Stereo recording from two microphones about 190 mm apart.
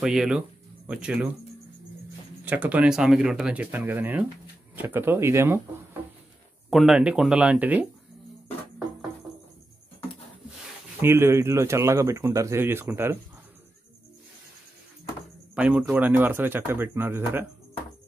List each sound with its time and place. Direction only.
0.0 s speech: 5° right (ahead or behind)
2.4 s speech: 10° right (ahead or behind)
6.7 s speech: centre (ahead or behind)
11.0 s speech: 10° right (ahead or behind)
15.5 s speech: 5° right (ahead or behind)